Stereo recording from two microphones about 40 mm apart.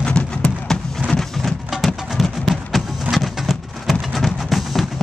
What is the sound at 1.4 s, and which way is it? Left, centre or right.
Music, centre.